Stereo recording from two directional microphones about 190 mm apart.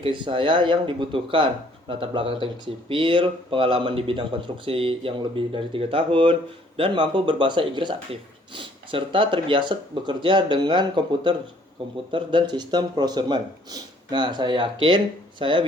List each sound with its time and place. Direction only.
0.0 s speech: 25° right (ahead or behind)